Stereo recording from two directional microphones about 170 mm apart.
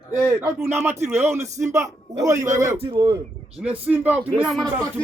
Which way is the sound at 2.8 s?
30° right (ahead or behind).